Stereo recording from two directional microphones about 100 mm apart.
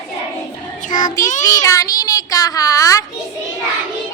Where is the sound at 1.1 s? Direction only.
35° left (ahead or behind).